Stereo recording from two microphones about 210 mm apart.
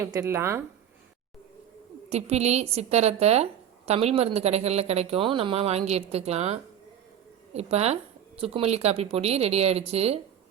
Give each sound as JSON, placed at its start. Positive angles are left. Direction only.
{"t": 0.0, "sound": "speech", "side_deg": -15}
{"t": 2.0, "sound": "a woman's voice", "side_deg": -30}